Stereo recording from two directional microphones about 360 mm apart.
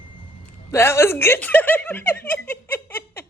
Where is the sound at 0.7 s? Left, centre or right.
Centre.